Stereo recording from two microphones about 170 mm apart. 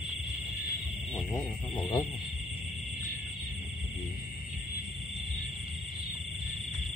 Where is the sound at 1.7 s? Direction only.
30° left (ahead or behind).